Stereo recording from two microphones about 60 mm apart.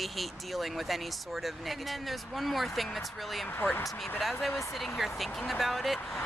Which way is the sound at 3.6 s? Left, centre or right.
Left.